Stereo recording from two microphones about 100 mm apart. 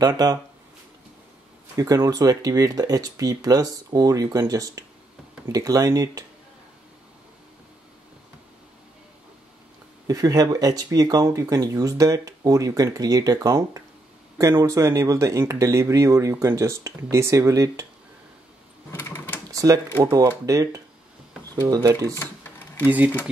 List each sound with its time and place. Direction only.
0.0 s speech: 40° right (ahead or behind)
1.8 s speech: 35° right (ahead or behind)
10.0 s speech: 40° right (ahead or behind)
18.9 s sewing machine: 25° left (ahead or behind)
19.5 s typing: 35° right (ahead or behind)
20.1 s speech: 40° right (ahead or behind)
22.1 s a sound: 20° left (ahead or behind)
22.8 s speech: 15° right (ahead or behind)